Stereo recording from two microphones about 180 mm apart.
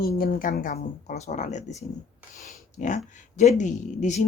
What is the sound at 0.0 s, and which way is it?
Speech, 50° left (ahead or behind).